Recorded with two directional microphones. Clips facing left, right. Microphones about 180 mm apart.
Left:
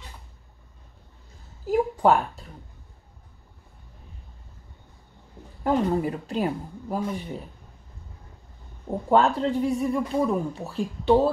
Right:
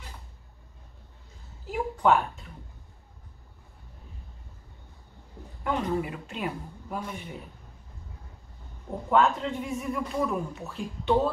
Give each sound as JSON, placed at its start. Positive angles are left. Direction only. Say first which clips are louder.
{"t": 1.7, "sound": "a sound", "louder": "left 4 dB", "side_deg": 35}
{"t": 5.6, "sound": "speech", "louder": "left 5 dB", "side_deg": 35}
{"t": 9.1, "sound": "speech", "louder": "left 3 dB", "side_deg": 35}